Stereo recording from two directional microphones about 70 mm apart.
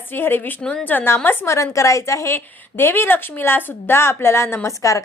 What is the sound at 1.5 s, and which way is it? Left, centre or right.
Speech, left.